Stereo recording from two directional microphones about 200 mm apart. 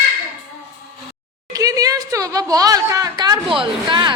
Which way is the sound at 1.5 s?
15° right (ahead or behind).